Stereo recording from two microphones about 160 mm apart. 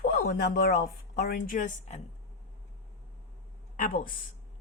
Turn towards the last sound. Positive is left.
turn(degrees=60)  # may be behind; listen again after turning